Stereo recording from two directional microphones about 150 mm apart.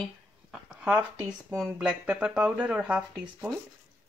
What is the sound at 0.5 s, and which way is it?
Speech, 10° right (ahead or behind).